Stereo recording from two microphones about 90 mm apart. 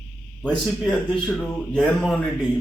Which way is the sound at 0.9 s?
10° left (ahead or behind).